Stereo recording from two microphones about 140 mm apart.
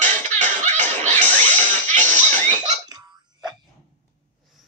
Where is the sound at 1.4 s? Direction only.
60° right (ahead or behind).